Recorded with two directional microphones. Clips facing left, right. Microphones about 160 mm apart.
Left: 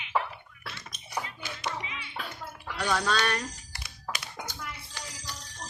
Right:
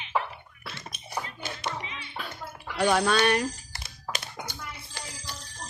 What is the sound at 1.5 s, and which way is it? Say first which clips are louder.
Hands: right 1 dB; 30° right (ahead or behind).